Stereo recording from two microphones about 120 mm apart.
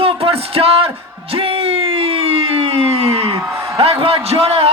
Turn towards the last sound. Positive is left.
turn(degrees=-55)  # may be behind; listen again after turning